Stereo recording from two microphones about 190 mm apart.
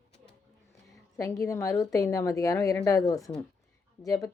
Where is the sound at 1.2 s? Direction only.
15° left (ahead or behind).